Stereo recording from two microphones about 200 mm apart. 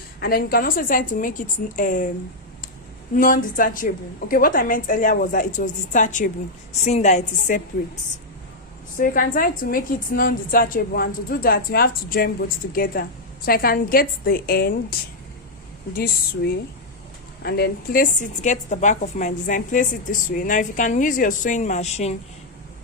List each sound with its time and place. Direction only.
0.2 s a woman's voice: 50° left (ahead or behind)
3.2 s a woman's voice: 40° left (ahead or behind)
9.0 s a woman's voice: 45° left (ahead or behind)